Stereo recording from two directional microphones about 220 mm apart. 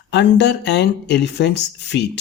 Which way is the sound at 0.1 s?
50° left (ahead or behind).